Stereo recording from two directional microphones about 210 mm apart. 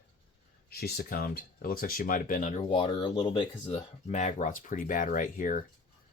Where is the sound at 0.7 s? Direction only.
50° left (ahead or behind).